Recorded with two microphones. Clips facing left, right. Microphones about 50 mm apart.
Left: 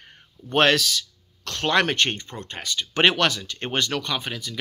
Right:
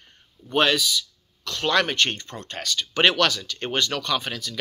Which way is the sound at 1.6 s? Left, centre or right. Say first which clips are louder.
Left 1 dB; left.